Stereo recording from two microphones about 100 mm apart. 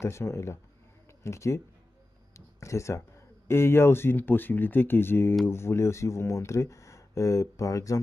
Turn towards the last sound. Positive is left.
turn(degrees=35)  # may be behind; listen again after turning